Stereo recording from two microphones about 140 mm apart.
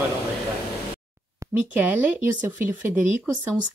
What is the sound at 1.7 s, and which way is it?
Speech, 10° right (ahead or behind).